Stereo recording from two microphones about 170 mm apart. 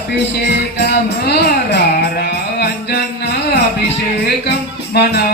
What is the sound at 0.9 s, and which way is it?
Music, 80° left.